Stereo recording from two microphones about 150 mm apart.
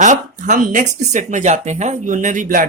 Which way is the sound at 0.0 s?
55° right (ahead or behind).